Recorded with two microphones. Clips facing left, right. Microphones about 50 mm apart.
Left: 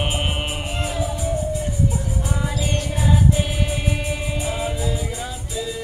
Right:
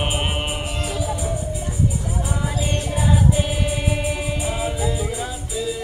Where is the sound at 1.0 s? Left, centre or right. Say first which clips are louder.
Left 1 dB; centre.